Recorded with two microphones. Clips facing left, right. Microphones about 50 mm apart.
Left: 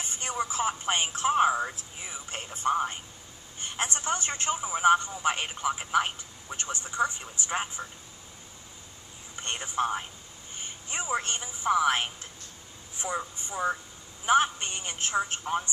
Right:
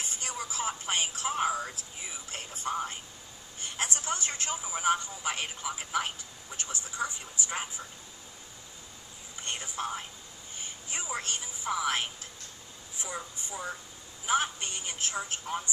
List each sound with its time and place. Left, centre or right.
0.2 s telephone: left
2.3 s a sound: left
3.8 s telephone: left
5.6 s a woman's voice: left
9.4 s a woman's voice: left
13.5 s a woman's voice: left